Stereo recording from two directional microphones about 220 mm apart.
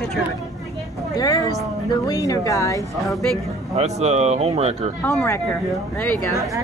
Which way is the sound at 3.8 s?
30° right (ahead or behind).